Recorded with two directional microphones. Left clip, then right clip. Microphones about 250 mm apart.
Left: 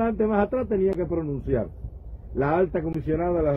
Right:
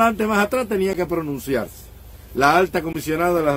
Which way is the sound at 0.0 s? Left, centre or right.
Centre.